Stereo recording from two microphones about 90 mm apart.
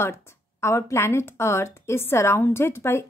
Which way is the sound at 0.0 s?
30° left (ahead or behind).